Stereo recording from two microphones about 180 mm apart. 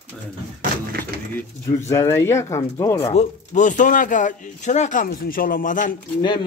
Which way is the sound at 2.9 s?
35° left (ahead or behind).